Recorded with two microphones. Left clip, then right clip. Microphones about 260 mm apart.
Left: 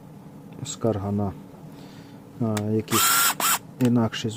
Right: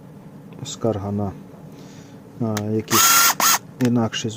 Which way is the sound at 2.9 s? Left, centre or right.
Centre.